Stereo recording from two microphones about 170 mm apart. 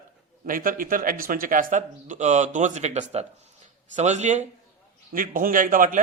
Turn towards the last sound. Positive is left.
turn(degrees=-50)  # may be behind; listen again after turning